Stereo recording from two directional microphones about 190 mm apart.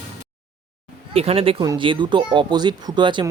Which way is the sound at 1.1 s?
30° right (ahead or behind).